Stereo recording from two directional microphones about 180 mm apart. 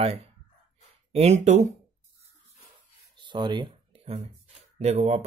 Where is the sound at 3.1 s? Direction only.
25° right (ahead or behind).